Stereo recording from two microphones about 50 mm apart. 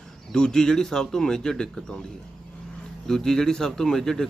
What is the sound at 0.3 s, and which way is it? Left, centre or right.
Speech, centre.